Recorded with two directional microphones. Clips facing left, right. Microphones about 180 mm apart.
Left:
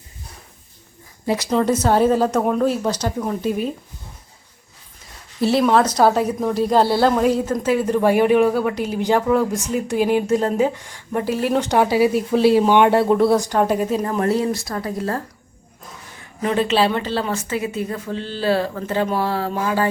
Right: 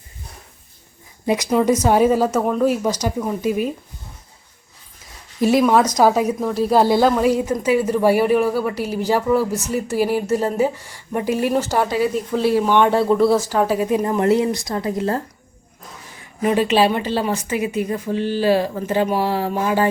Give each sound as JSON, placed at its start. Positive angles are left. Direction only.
{"t": 1.3, "sound": "speech", "side_deg": -10}
{"t": 2.4, "sound": "a woman's voice", "side_deg": 5}
{"t": 2.6, "sound": "speech", "side_deg": -10}
{"t": 5.4, "sound": "a woman's voice", "side_deg": -10}
{"t": 11.9, "sound": "speech", "side_deg": 10}
{"t": 12.9, "sound": "a woman's voice", "side_deg": 0}
{"t": 16.4, "sound": "speech", "side_deg": -15}